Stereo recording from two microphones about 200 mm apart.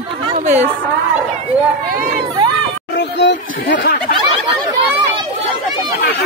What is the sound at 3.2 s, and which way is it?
Speech, 60° left (ahead or behind).